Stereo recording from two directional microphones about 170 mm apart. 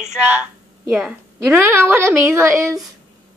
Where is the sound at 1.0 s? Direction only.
10° right (ahead or behind).